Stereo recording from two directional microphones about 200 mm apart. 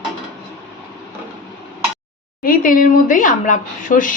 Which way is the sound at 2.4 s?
45° left (ahead or behind).